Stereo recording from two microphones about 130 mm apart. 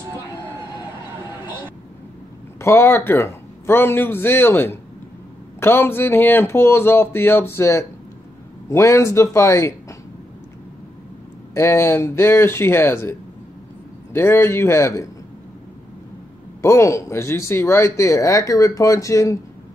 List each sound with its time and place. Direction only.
2.6 s speech: 20° left (ahead or behind)
11.5 s speech: 20° left (ahead or behind)
14.1 s speech: 20° left (ahead or behind)
16.6 s speech: 25° left (ahead or behind)